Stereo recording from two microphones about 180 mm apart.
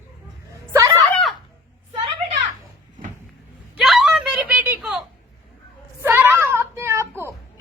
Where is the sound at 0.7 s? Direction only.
15° right (ahead or behind).